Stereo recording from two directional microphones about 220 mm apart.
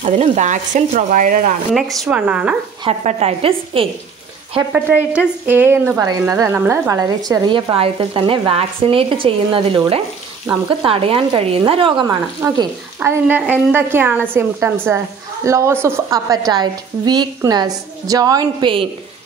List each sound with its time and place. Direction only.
0.0 s speech: 35° right (ahead or behind)
2.0 s a woman's voice: 5° right (ahead or behind)
2.8 s speech: 30° right (ahead or behind)
4.7 s a woman's voice: 5° right (ahead or behind)